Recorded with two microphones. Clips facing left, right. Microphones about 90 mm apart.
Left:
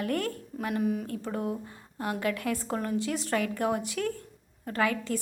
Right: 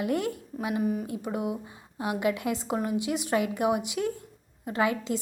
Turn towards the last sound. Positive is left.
turn(degrees=-20)  # may be behind; listen again after turning